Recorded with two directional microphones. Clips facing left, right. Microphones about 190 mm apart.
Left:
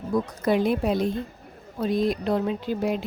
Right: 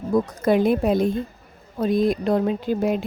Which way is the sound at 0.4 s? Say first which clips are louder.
Right 3 dB; 50° right (ahead or behind).